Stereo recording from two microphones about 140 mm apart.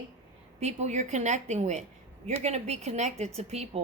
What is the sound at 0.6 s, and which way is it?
A woman's voice, 55° right (ahead or behind).